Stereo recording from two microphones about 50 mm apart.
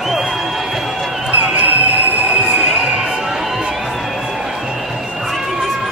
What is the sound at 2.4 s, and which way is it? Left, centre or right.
Music, centre.